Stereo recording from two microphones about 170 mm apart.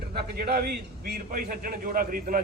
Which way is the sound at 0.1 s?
65° right (ahead or behind).